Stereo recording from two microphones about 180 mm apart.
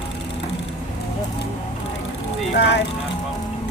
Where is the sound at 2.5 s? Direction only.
70° left (ahead or behind).